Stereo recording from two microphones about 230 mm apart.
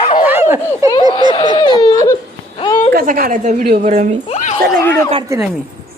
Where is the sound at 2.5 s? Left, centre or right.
Left.